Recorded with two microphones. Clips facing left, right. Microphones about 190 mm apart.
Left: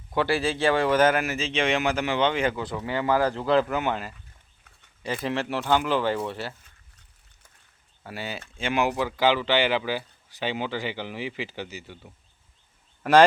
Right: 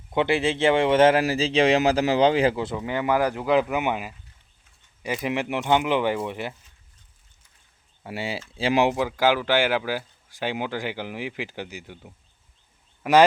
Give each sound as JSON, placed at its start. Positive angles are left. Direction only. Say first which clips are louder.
{"t": 0.1, "sound": "speech", "louder": "right 2 dB", "side_deg": -20}
{"t": 2.7, "sound": "speech", "louder": "right 1 dB", "side_deg": -15}
{"t": 8.0, "sound": "speech", "louder": "right 4 dB", "side_deg": -25}
{"t": 9.0, "sound": "speech", "louder": "right 1 dB", "side_deg": -10}